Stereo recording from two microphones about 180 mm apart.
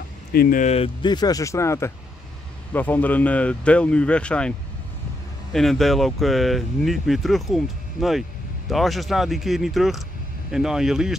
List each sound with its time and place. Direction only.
0.3 s speech: 55° left (ahead or behind); by 11.1 s centre (ahead or behind)